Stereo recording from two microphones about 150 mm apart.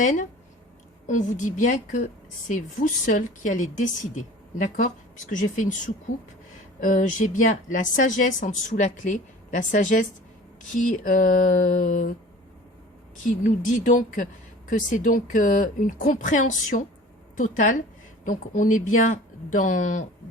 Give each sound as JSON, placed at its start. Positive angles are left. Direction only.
{"t": 0.0, "sound": "a woman's voice", "side_deg": 55}
{"t": 13.2, "sound": "a woman's voice", "side_deg": 60}